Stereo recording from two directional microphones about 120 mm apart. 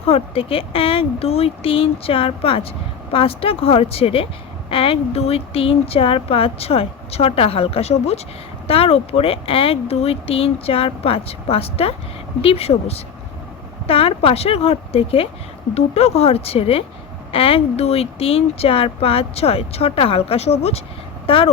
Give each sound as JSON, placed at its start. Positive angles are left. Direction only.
{"t": 0.1, "sound": "speech", "side_deg": 50}
{"t": 21.2, "sound": "speech", "side_deg": 50}